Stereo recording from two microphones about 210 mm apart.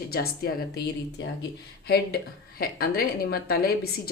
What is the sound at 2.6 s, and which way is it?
Speech, 45° left (ahead or behind).